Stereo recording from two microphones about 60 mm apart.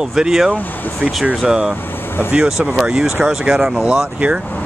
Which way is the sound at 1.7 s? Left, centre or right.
Left.